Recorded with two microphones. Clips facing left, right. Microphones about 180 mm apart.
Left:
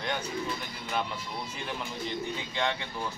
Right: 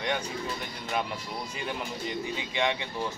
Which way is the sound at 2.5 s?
15° right (ahead or behind).